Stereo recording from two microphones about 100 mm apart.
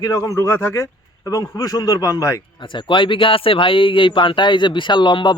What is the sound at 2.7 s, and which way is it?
Speech, 55° left (ahead or behind).